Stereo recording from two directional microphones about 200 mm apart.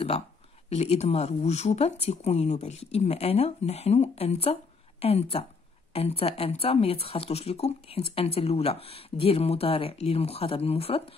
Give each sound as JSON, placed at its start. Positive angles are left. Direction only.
{"t": 0.7, "sound": "speech", "side_deg": 30}